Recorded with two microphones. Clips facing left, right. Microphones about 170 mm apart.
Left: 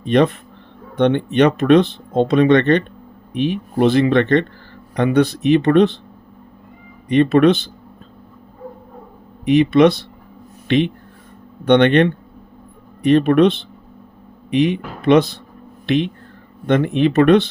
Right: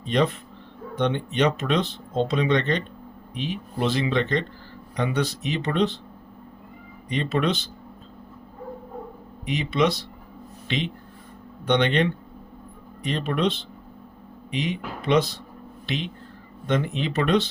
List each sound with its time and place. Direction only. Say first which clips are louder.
0.0 s speech: left 8 dB; 60° left (ahead or behind)
7.1 s speech: left 12 dB; 60° left (ahead or behind)
9.5 s speech: left 11 dB; 60° left (ahead or behind)